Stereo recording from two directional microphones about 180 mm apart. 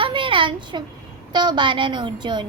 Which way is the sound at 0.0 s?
30° right (ahead or behind).